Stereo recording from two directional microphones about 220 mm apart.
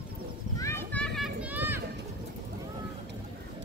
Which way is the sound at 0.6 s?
10° left (ahead or behind).